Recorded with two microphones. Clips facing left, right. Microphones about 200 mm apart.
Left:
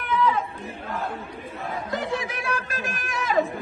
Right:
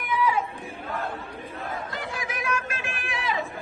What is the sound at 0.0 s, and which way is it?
Chatter, 10° right (ahead or behind).